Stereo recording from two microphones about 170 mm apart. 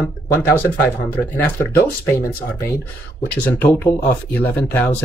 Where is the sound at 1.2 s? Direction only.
15° left (ahead or behind).